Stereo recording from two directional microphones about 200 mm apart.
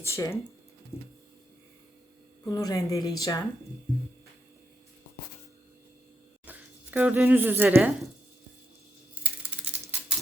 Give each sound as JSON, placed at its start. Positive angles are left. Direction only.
{"t": 0.0, "sound": "speech", "side_deg": 15}
{"t": 2.4, "sound": "speech", "side_deg": 15}
{"t": 6.4, "sound": "speech", "side_deg": -10}